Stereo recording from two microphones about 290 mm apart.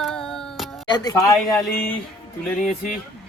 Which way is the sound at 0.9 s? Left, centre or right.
Centre.